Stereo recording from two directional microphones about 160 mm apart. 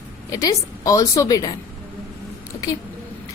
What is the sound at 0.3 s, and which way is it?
A woman's voice, 20° left (ahead or behind).